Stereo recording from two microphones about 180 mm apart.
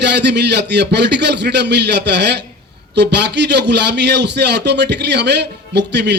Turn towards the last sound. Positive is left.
turn(degrees=-70)  # may be behind; listen again after turning